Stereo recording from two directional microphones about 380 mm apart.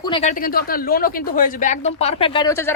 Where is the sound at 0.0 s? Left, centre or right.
Centre.